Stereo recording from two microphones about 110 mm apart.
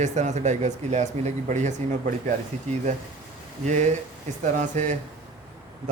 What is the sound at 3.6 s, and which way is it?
Speech, 90° right.